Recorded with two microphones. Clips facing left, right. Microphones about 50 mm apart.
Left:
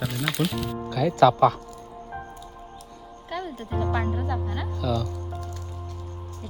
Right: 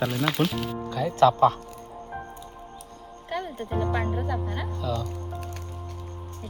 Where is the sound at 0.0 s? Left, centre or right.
Centre.